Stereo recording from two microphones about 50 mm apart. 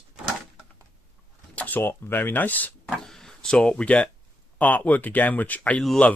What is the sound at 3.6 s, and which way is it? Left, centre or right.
Speech, left.